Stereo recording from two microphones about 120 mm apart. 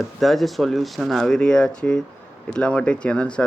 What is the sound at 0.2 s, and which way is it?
Speech, centre (ahead or behind).